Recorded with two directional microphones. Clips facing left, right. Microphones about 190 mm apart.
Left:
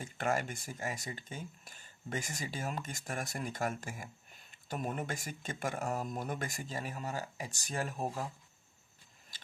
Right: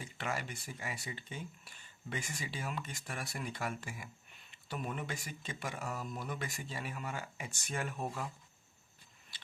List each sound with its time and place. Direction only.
0.0 s speech: 45° left (ahead or behind)